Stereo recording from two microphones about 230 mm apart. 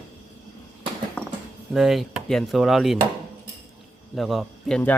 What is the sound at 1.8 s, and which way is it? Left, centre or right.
Speech, centre.